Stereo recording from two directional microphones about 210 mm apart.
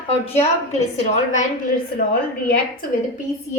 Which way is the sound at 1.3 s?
40° left (ahead or behind).